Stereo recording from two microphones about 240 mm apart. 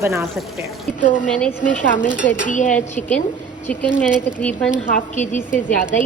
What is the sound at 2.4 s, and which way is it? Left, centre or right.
Speech, left.